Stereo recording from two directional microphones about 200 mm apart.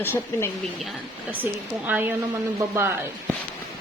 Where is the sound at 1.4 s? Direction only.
10° right (ahead or behind).